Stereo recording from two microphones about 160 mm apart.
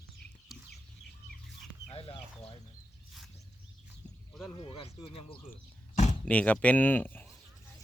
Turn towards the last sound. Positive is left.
turn(degrees=10)  # may be behind; listen again after turning